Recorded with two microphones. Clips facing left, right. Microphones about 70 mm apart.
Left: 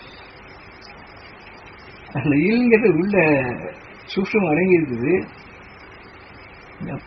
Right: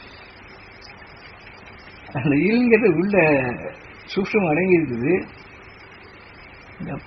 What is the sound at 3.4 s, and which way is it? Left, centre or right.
Speech, left.